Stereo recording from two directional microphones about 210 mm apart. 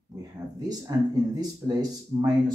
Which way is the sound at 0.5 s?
15° right (ahead or behind).